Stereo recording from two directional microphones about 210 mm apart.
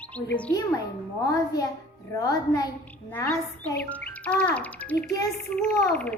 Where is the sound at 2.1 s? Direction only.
15° left (ahead or behind).